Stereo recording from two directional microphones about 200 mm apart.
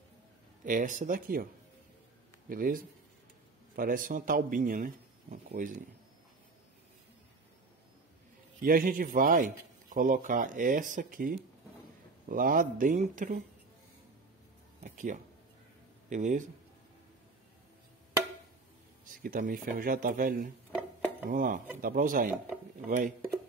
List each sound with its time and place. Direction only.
0.7 s speech: 40° right (ahead or behind)
2.5 s speech: 45° right (ahead or behind)
8.6 s speech: 45° right (ahead or behind)
14.8 s a sound: 40° right (ahead or behind)
16.1 s speech: 40° right (ahead or behind)
19.2 s speech: 45° right (ahead or behind)